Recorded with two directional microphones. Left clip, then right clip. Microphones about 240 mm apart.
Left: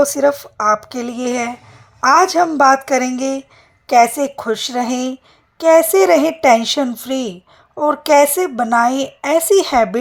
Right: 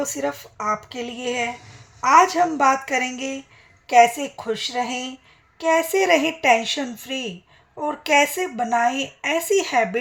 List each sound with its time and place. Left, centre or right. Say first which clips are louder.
0.1 s speech: left 12 dB; left
0.5 s a sound: left 9 dB; left
0.9 s speech: left 6 dB; left